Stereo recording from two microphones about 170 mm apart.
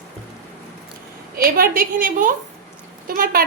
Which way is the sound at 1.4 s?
60° right (ahead or behind).